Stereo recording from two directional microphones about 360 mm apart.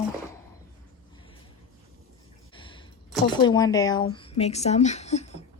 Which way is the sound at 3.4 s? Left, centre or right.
Centre.